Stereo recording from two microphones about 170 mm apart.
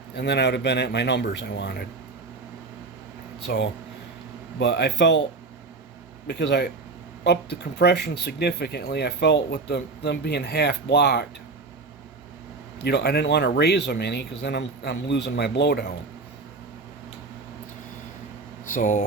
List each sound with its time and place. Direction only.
0.2 s speech: 80° left
3.4 s speech: 90° left
6.2 s speech: 85° left
12.8 s speech: 75° left (ahead or behind)
18.7 s speech: 50° left (ahead or behind)